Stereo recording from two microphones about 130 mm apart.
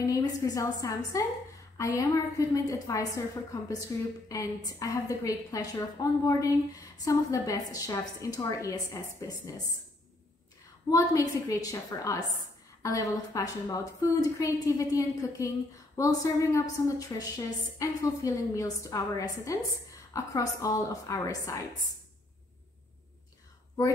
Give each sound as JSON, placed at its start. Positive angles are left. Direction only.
{"t": 0.0, "sound": "a woman's voice", "side_deg": 25}
{"t": 10.9, "sound": "a woman's voice", "side_deg": 25}